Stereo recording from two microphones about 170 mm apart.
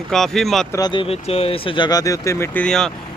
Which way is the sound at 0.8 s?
25° left (ahead or behind).